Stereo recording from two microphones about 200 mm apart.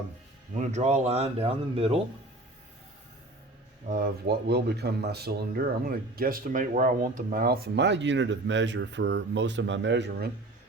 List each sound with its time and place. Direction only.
0.6 s speech: 35° right (ahead or behind)
3.8 s speech: 45° right (ahead or behind)